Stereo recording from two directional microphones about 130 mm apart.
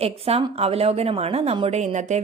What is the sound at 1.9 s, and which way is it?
Speech, 65° right (ahead or behind).